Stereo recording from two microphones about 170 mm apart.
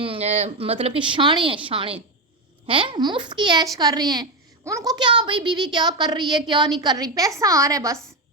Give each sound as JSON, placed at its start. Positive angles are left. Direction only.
{"t": 0.0, "sound": "speech", "side_deg": -35}